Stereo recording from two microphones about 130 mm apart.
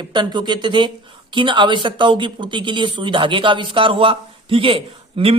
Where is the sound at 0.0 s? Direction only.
35° right (ahead or behind).